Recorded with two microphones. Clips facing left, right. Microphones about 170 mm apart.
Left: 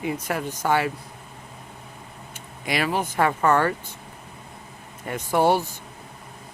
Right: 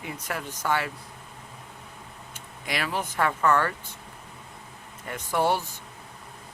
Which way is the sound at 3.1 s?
25° left (ahead or behind).